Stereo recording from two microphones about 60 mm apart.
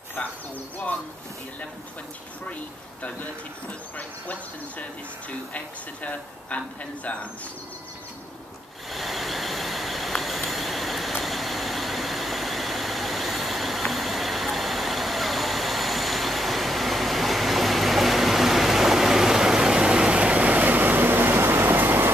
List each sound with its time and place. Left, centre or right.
3.9 s speech: left
6.5 s speech: left
8.9 s vehicle: centre; by 22.1 s right